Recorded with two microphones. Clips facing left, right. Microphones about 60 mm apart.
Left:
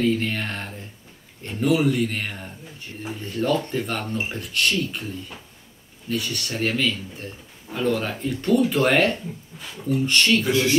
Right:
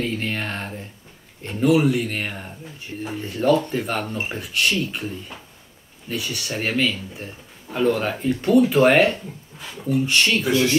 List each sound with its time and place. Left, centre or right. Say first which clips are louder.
0.0 s speech: left 3 dB; centre
6.0 s speech: left 1 dB; centre